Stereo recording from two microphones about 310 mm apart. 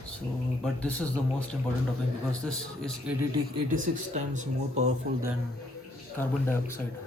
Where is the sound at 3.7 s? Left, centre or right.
Right.